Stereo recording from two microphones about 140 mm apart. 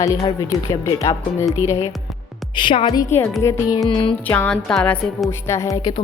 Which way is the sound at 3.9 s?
40° left (ahead or behind).